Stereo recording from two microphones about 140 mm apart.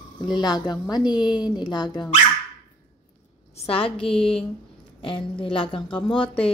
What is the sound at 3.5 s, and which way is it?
A woman's voice, 45° left (ahead or behind).